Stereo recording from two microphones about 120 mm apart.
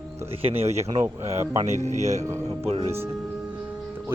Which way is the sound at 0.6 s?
65° right (ahead or behind).